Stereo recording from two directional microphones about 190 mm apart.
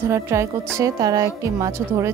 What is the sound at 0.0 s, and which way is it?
Speech, 15° right (ahead or behind).